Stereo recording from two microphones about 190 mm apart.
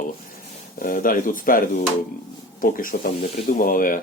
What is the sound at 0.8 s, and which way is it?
Speech, 45° left (ahead or behind).